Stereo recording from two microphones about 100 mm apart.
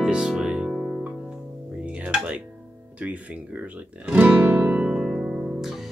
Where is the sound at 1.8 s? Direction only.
10° right (ahead or behind).